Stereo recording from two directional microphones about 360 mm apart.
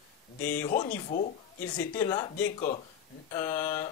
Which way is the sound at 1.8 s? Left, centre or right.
Centre.